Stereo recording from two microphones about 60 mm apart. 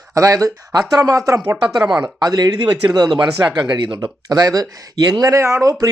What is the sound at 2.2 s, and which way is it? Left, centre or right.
Speech, right.